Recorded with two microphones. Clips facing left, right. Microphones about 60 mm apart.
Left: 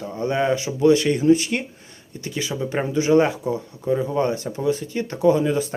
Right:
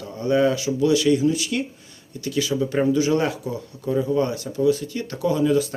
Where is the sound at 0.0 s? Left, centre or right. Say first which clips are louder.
Right 2 dB; left.